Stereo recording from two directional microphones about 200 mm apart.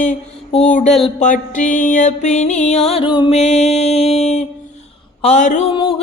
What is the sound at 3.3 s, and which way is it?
Mantra, 35° left (ahead or behind).